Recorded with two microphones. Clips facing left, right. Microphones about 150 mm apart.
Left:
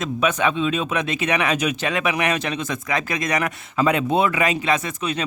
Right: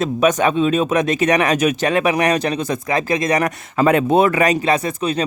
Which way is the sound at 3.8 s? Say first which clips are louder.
Right 5 dB; 50° right (ahead or behind).